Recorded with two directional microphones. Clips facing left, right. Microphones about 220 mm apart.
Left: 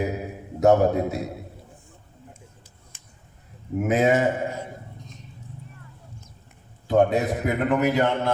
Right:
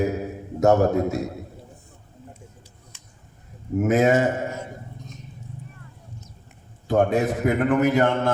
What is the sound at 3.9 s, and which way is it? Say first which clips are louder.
Speech: right 2 dB; 45° right (ahead or behind).